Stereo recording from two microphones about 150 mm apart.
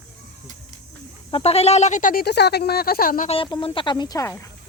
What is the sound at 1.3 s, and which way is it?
Speech, 45° left (ahead or behind).